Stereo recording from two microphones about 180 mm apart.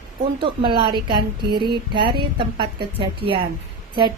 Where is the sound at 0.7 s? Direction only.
25° right (ahead or behind).